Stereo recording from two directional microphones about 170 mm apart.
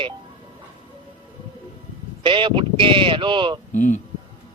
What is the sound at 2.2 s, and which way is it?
Speech, 30° right (ahead or behind).